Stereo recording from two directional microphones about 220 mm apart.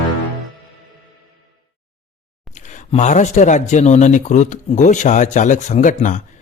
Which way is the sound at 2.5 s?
35° left (ahead or behind).